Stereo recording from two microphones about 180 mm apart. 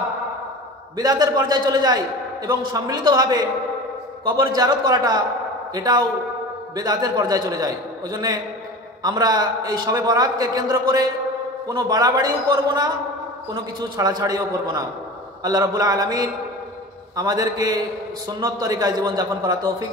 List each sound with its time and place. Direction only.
0.9 s a man's voice: 20° right (ahead or behind)